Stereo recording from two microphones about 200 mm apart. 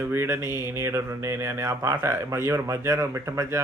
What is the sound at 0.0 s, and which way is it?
Speech, 10° right (ahead or behind).